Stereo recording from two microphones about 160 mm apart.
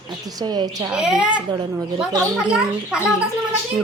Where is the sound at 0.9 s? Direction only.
5° right (ahead or behind).